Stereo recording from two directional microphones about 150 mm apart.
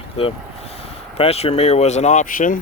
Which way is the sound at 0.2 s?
40° left (ahead or behind).